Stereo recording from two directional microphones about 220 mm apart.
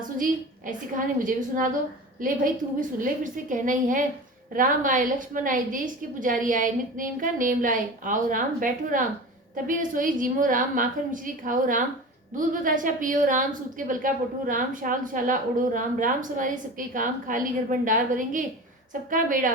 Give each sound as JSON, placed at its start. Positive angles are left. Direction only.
{"t": 0.0, "sound": "a woman's voice", "side_deg": -35}